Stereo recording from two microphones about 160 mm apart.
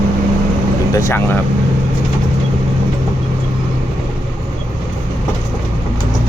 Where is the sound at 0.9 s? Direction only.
15° left (ahead or behind).